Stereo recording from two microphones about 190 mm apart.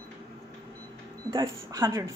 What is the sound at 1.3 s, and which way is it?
Speech, 15° right (ahead or behind).